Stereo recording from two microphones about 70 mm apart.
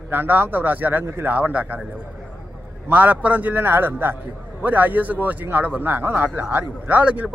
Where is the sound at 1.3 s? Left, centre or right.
Right.